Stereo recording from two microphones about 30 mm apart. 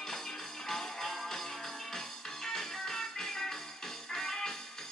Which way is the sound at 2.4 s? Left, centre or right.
Centre.